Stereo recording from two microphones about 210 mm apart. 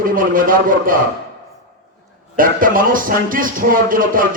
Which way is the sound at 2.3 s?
40° right (ahead or behind).